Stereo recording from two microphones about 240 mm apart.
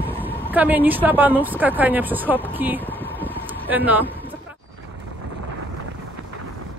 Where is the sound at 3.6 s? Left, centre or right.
Centre.